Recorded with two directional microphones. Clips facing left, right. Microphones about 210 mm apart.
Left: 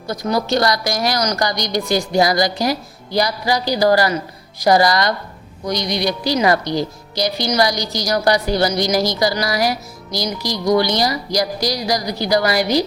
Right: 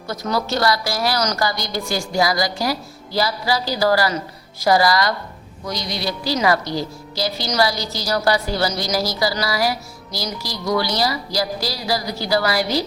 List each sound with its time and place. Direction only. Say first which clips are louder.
0.1 s a woman's voice: left 4 dB; 15° left (ahead or behind)